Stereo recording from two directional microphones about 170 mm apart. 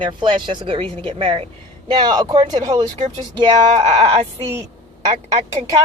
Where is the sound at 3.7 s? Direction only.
40° right (ahead or behind).